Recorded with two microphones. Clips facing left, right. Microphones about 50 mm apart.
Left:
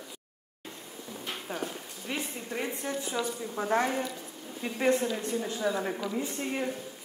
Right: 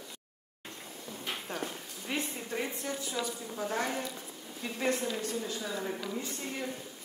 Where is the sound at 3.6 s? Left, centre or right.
Left.